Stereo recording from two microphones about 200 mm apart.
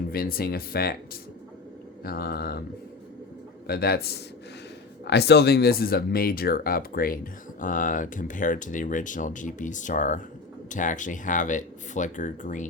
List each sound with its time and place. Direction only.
0.1 s speech: 50° left (ahead or behind)
2.0 s speech: 50° left (ahead or behind)
3.7 s speech: 50° left (ahead or behind)